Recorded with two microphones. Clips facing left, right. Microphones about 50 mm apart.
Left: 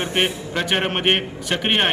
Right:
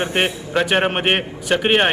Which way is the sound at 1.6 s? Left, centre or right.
Centre.